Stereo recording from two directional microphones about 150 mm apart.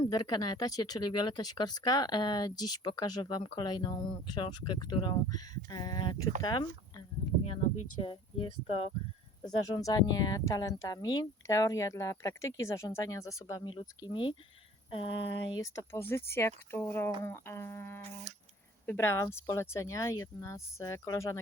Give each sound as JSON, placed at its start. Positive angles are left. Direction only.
{"t": 0.0, "sound": "speech", "side_deg": 30}
{"t": 8.0, "sound": "speech", "side_deg": 40}
{"t": 9.4, "sound": "speech", "side_deg": 25}
{"t": 13.7, "sound": "speech", "side_deg": 35}
{"t": 14.8, "sound": "a sound", "side_deg": 35}
{"t": 15.5, "sound": "speech", "side_deg": 25}